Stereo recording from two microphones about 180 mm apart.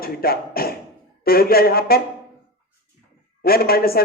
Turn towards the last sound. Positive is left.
turn(degrees=55)  # may be behind; listen again after turning